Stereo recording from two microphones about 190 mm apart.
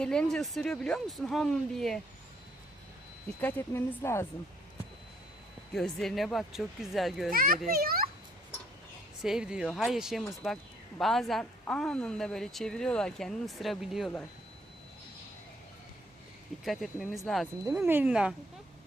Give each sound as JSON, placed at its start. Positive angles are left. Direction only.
{"t": 0.0, "sound": "a woman's voice", "side_deg": 5}
{"t": 3.4, "sound": "speech", "side_deg": 10}
{"t": 5.7, "sound": "a woman's voice", "side_deg": 0}
{"t": 7.3, "sound": "a child's voice", "side_deg": -50}
{"t": 9.2, "sound": "a woman's voice", "side_deg": -5}
{"t": 16.6, "sound": "a woman's voice", "side_deg": 0}